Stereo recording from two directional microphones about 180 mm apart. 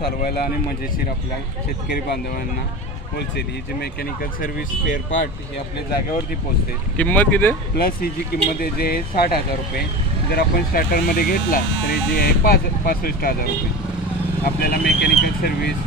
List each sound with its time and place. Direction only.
3.3 s speech: 60° left (ahead or behind)
7.0 s speech: 10° left (ahead or behind)
7.7 s speech: 55° left (ahead or behind)
10.3 s speech: 55° left (ahead or behind)
14.4 s speech: 60° left (ahead or behind)